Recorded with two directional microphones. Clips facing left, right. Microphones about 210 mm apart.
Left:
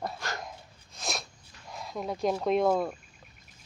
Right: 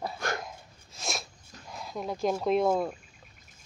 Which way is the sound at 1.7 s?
Centre (ahead or behind).